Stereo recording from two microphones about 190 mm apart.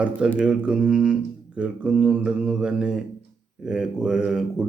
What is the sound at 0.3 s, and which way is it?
Speech, 5° right (ahead or behind).